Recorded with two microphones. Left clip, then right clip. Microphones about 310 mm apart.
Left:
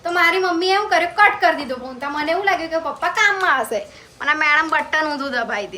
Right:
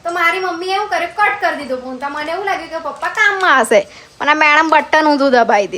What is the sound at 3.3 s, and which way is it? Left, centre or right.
Speech, right.